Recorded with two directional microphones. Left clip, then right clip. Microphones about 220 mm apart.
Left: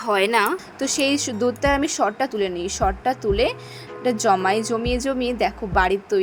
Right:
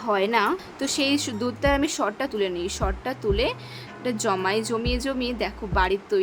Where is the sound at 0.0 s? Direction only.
30° left (ahead or behind).